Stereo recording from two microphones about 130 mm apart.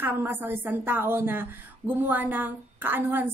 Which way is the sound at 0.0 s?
15° right (ahead or behind).